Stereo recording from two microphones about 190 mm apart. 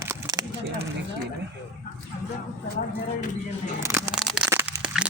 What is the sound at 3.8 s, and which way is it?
Speech, 15° right (ahead or behind).